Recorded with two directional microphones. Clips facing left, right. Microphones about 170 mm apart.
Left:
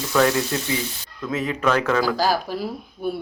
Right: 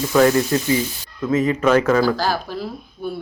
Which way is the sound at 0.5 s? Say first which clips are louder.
Right 6 dB; centre (ahead or behind).